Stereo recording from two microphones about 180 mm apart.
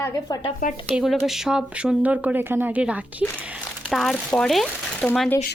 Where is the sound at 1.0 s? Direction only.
Centre (ahead or behind).